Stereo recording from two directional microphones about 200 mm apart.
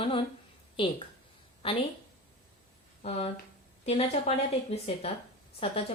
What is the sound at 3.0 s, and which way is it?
A woman's voice, 30° left (ahead or behind).